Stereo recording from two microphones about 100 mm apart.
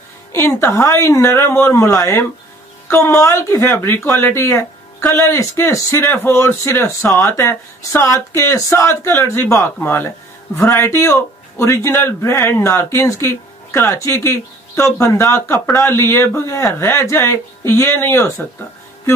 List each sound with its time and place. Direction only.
0.3 s speech: 25° left (ahead or behind)